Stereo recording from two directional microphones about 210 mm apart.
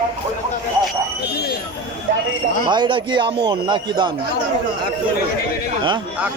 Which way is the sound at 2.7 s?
20° right (ahead or behind).